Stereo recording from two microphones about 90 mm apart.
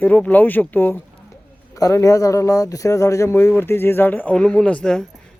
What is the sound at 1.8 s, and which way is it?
Speech, 40° left (ahead or behind).